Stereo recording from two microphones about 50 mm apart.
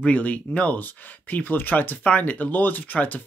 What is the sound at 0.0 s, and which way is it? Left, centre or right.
Speech, left.